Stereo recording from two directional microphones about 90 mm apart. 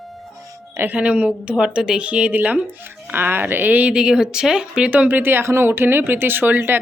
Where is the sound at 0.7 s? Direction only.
25° right (ahead or behind).